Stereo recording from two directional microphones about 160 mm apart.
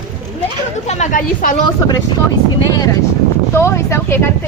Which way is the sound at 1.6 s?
25° left (ahead or behind).